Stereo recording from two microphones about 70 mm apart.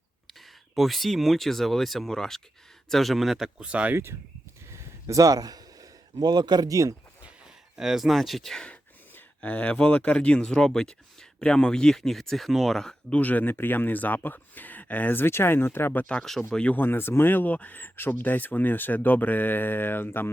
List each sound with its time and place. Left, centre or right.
0.8 s speech: centre
3.6 s speech: centre
3.9 s speech: right
4.7 s a sound: right
6.7 s speech: right
7.8 s speech: centre
8.7 s speech: left
13.1 s speech: left
16.1 s speech: centre
16.7 s speech: left